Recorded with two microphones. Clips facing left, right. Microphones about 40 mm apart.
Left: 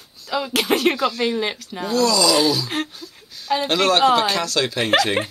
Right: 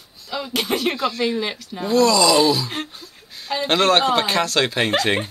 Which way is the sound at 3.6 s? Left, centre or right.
Right.